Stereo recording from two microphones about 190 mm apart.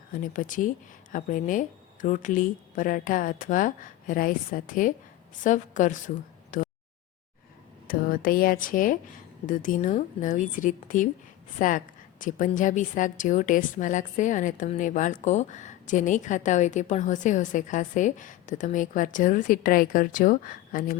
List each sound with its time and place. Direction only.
0.1 s speech: 45° left (ahead or behind)
6.5 s a sound: 45° left (ahead or behind)
7.9 s speech: 50° left (ahead or behind)